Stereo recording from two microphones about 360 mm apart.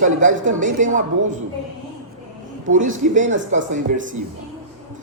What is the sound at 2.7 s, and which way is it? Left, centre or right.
Speech, right.